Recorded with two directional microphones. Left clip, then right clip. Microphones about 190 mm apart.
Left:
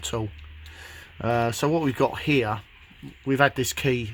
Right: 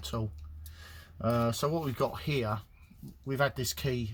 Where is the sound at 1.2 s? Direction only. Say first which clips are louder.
Left 6 dB; 60° left (ahead or behind).